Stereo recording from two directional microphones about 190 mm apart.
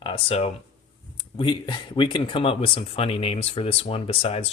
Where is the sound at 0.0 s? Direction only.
30° left (ahead or behind).